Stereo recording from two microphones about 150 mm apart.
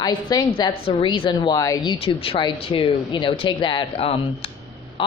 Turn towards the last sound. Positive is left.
turn(degrees=35)  # may be behind; listen again after turning